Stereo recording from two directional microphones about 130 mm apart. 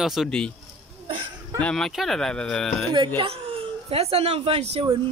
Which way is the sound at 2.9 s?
40° right (ahead or behind).